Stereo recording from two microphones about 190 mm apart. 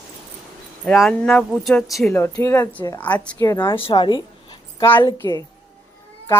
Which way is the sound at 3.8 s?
25° left (ahead or behind).